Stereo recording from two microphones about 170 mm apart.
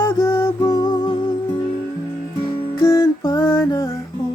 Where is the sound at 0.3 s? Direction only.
15° left (ahead or behind).